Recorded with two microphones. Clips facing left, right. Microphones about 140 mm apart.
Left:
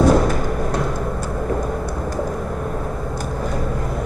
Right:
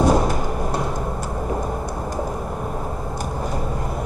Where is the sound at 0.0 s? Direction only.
10° right (ahead or behind).